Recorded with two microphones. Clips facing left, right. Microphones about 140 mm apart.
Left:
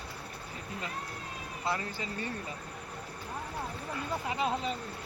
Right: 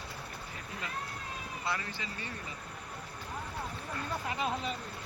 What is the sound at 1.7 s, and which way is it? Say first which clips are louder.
Speech: left 4 dB; 40° left (ahead or behind).